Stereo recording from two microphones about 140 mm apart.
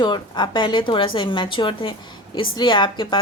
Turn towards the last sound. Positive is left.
turn(degrees=35)  # may be behind; listen again after turning